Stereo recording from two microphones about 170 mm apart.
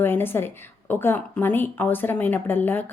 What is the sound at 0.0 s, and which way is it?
A woman's voice, 15° left (ahead or behind).